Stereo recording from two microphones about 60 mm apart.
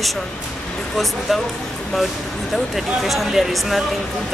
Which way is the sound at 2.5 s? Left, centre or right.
Centre.